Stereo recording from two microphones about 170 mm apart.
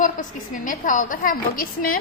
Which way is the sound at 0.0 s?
50° left (ahead or behind).